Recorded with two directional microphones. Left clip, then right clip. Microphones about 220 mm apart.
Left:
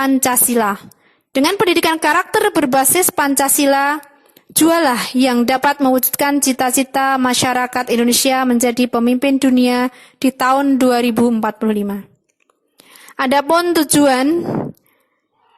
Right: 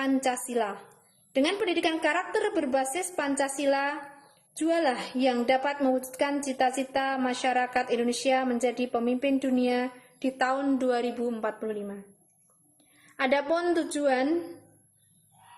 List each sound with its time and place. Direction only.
0.0 s a woman's voice: 45° left (ahead or behind)
13.1 s a woman's voice: 45° left (ahead or behind)